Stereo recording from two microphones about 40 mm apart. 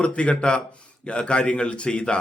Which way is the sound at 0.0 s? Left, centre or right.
Left.